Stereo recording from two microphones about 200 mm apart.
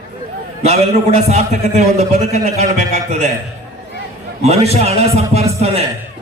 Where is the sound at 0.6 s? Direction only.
30° right (ahead or behind).